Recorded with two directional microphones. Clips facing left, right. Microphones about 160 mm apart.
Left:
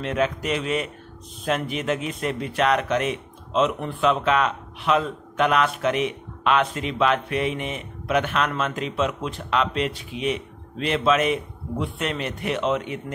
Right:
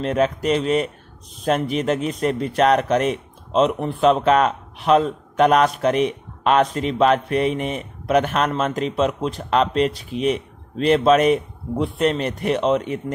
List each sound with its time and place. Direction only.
0.0 s a man's voice: 40° right (ahead or behind)